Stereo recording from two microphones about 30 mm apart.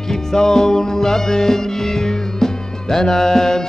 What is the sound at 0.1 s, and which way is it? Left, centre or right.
Music, centre.